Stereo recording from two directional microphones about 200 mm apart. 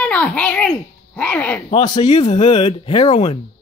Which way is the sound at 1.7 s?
20° left (ahead or behind).